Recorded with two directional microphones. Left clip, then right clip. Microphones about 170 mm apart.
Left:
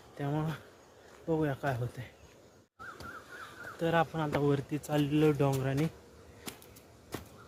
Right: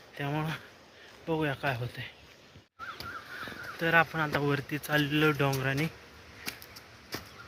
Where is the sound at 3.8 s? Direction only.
15° left (ahead or behind).